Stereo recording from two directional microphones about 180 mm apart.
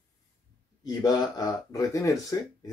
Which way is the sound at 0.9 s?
20° left (ahead or behind).